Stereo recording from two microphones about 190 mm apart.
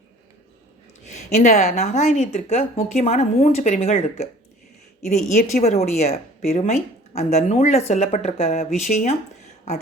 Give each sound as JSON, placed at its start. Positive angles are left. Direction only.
{"t": 1.0, "sound": "a woman's voice", "side_deg": 35}